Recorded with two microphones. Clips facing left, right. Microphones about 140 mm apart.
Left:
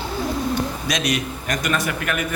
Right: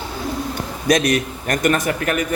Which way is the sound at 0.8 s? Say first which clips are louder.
Right 6 dB; 50° right (ahead or behind).